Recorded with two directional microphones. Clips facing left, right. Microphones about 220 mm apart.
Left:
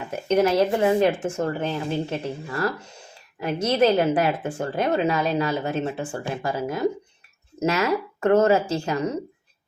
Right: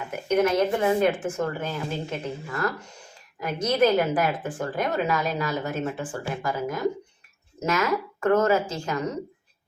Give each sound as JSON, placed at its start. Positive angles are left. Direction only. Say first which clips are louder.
{"t": 0.1, "sound": "a woman's voice", "louder": "left 2 dB", "side_deg": 30}